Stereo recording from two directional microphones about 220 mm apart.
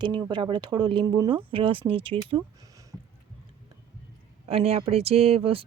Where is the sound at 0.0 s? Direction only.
20° right (ahead or behind).